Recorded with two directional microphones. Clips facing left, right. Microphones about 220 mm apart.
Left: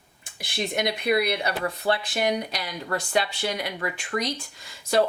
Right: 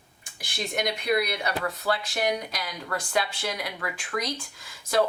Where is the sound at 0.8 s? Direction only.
25° left (ahead or behind).